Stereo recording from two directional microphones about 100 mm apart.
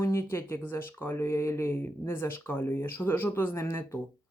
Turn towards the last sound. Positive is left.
turn(degrees=20)  # may be behind; listen again after turning